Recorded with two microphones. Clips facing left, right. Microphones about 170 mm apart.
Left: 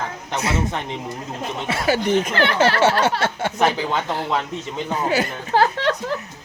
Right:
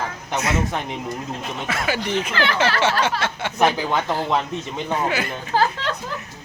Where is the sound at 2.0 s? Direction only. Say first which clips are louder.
Left 4 dB; 50° left (ahead or behind).